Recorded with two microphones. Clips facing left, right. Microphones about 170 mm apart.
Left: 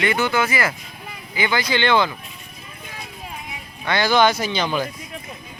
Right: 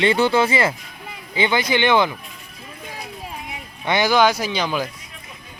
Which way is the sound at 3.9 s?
20° right (ahead or behind).